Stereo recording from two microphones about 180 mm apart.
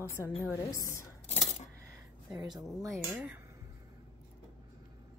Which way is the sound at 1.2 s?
40° left (ahead or behind).